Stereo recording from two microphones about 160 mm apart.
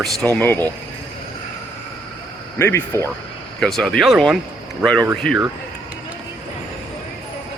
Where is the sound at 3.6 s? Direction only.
5° left (ahead or behind).